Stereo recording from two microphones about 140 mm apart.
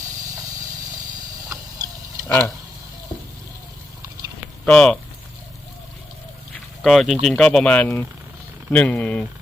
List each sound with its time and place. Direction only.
1.8 s a sound: 25° right (ahead or behind)
4.6 s speech: 5° left (ahead or behind)
6.8 s speech: centre (ahead or behind)